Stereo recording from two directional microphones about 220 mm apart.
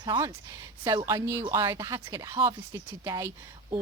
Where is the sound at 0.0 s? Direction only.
15° right (ahead or behind).